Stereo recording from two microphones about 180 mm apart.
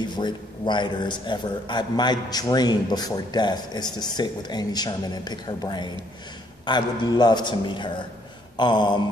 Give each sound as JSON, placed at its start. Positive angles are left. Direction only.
{"t": 0.2, "sound": "speech", "side_deg": 25}